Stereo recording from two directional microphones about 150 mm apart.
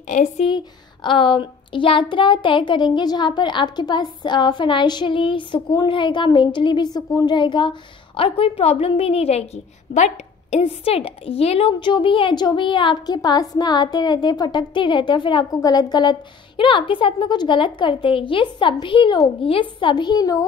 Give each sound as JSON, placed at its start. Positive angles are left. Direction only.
{"t": 0.1, "sound": "a woman's voice", "side_deg": 55}
{"t": 1.0, "sound": "a woman's voice", "side_deg": 35}